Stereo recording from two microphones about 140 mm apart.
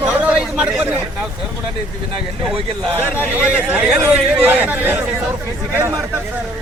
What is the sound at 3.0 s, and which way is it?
Speech, 10° right (ahead or behind).